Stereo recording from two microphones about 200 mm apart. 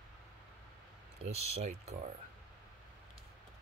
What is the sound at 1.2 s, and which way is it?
Speech, 30° right (ahead or behind).